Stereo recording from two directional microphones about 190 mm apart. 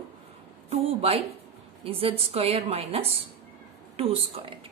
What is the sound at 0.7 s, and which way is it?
A woman's voice, 30° right (ahead or behind).